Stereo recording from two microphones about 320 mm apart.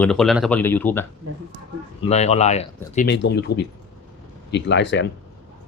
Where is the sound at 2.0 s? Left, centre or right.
Centre.